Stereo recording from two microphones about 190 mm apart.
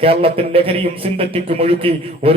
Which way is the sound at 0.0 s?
30° right (ahead or behind).